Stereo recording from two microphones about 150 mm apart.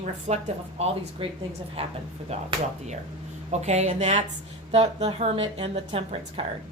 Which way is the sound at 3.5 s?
50° right (ahead or behind).